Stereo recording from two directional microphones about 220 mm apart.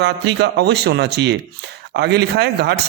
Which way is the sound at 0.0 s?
50° right (ahead or behind).